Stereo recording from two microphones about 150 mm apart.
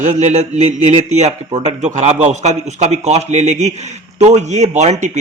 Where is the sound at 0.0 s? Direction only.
55° right (ahead or behind).